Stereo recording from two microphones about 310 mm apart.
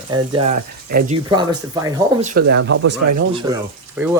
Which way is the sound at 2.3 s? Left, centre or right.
Right.